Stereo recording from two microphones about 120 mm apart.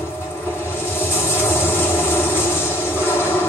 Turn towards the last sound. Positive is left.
turn(degrees=20)  # may be behind; listen again after turning